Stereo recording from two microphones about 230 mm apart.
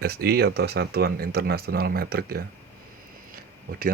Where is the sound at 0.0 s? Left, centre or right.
Right.